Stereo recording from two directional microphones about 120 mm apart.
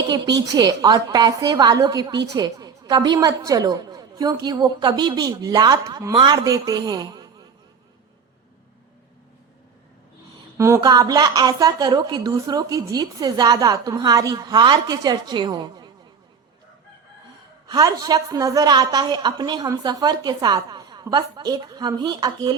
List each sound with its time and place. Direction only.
0.1 s a woman's voice: 35° right (ahead or behind)
10.6 s a woman's voice: 25° right (ahead or behind)
17.7 s a woman's voice: 35° right (ahead or behind)